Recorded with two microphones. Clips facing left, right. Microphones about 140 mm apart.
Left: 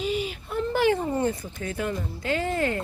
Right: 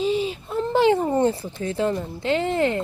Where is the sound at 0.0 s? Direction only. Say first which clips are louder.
Right 5 dB; 30° right (ahead or behind).